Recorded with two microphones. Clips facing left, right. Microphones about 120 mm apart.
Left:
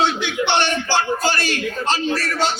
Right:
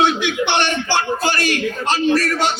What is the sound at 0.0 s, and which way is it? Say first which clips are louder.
A man's voice: right 3 dB; 15° right (ahead or behind).